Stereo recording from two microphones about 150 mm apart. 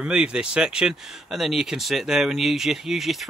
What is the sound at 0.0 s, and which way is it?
Speech, 5° right (ahead or behind).